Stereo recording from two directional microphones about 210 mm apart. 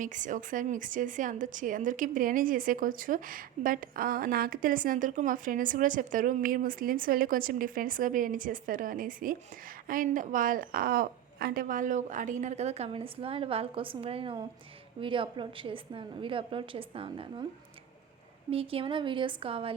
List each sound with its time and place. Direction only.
0.0 s a woman's voice: 35° right (ahead or behind)
18.5 s a woman's voice: 25° right (ahead or behind)